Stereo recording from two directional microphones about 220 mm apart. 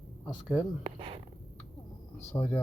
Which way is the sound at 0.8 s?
25° right (ahead or behind).